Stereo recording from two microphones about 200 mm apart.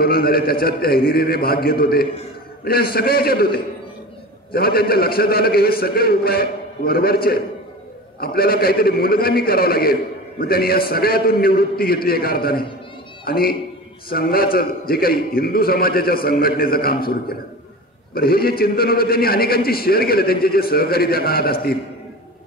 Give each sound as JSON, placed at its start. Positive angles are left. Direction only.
{"t": 0.0, "sound": "a man's voice", "side_deg": 50}